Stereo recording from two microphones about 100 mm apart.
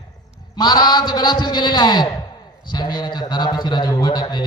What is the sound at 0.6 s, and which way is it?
A man's voice, 40° left (ahead or behind).